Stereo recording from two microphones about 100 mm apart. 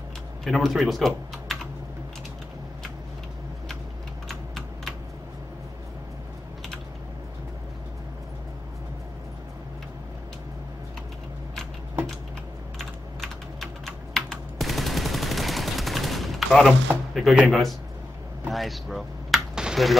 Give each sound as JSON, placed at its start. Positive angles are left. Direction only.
{"t": 0.4, "sound": "speech", "side_deg": 0}
{"t": 4.3, "sound": "computer keyboard", "side_deg": 0}
{"t": 12.7, "sound": "typing", "side_deg": 0}
{"t": 17.5, "sound": "a man's voice", "side_deg": 0}
{"t": 18.5, "sound": "a sound", "side_deg": 0}